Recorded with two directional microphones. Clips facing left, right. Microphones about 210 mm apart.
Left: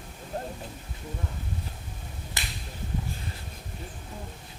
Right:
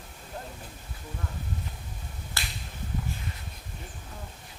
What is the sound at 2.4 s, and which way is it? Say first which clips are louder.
Finger snapping: even; 20° left (ahead or behind).